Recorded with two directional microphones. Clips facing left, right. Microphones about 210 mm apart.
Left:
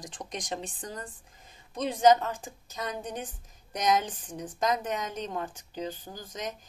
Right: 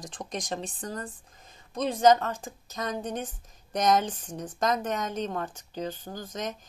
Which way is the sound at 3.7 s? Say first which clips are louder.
Right 3 dB; 10° left (ahead or behind).